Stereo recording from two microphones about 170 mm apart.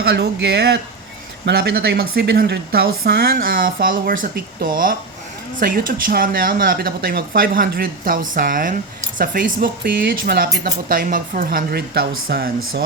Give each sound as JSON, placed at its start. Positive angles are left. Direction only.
{"t": 0.0, "sound": "speech", "side_deg": -80}